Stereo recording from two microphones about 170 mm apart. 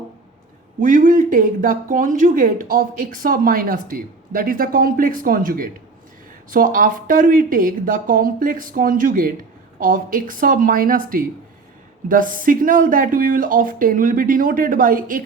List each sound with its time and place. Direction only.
0.8 s speech: 50° right (ahead or behind)